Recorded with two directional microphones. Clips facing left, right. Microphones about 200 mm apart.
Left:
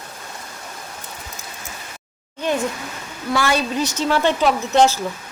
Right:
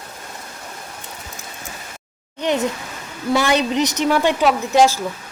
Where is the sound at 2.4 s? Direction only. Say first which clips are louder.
Right 2 dB; 20° right (ahead or behind).